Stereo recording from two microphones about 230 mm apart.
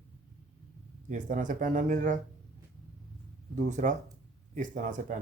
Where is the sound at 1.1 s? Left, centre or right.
Right.